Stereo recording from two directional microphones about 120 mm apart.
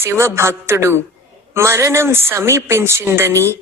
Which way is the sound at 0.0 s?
20° right (ahead or behind).